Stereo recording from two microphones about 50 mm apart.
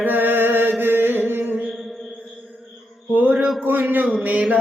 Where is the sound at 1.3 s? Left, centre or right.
Right.